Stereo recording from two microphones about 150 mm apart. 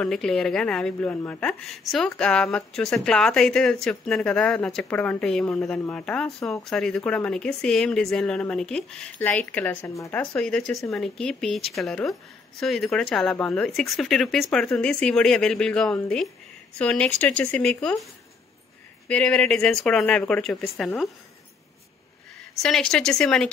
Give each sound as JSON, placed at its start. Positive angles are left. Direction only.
{"t": 0.0, "sound": "speech", "side_deg": 5}
{"t": 19.0, "sound": "speech", "side_deg": 5}
{"t": 22.6, "sound": "speech", "side_deg": 5}